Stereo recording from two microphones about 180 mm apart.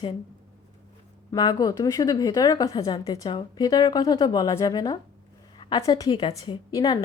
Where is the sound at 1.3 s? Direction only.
20° left (ahead or behind).